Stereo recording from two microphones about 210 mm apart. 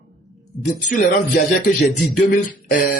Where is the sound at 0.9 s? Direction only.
40° left (ahead or behind).